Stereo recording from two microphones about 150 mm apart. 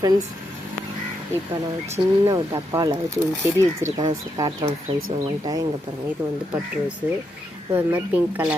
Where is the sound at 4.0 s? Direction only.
30° right (ahead or behind).